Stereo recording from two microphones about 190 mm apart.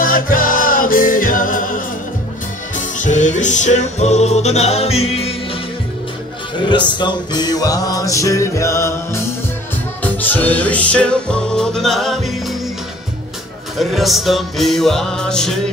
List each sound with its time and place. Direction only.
0.0 s music: 45° left (ahead or behind)
3.0 s music: 40° left (ahead or behind)
6.6 s music: 25° left (ahead or behind); by 12.2 s centre (ahead or behind)
13.7 s music: centre (ahead or behind)